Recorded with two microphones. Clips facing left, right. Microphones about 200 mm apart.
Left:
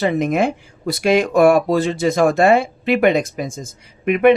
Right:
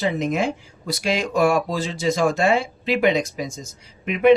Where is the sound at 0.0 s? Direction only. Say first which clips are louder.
Left 5 dB; 55° left (ahead or behind).